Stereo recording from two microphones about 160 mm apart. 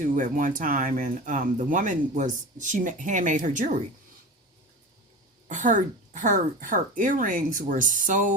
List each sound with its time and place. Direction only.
0.0 s speech: 55° right (ahead or behind)
5.5 s speech: 55° right (ahead or behind)